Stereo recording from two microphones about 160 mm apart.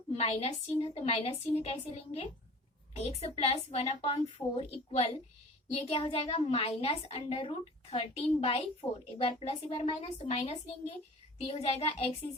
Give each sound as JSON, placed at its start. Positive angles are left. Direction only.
{"t": 0.2, "sound": "speech", "side_deg": 40}